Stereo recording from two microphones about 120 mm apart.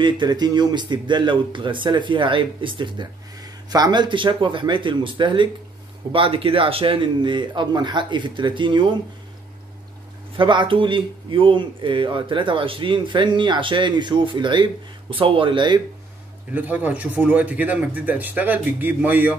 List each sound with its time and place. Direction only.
0.0 s speech: 35° right (ahead or behind)
10.3 s speech: 40° right (ahead or behind)
16.5 s speech: 15° right (ahead or behind)